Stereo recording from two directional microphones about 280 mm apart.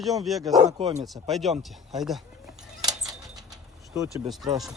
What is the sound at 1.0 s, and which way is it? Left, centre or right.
Speech, centre.